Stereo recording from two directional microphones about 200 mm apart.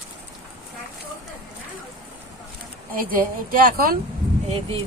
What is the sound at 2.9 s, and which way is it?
A woman's voice, 45° right (ahead or behind).